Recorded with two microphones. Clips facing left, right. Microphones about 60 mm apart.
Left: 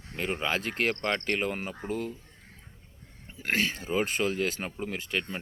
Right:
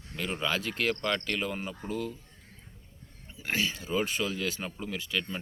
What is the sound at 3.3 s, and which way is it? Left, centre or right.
Speech, left.